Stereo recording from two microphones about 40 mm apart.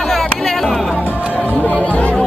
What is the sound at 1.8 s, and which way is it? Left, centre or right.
Chatter, left.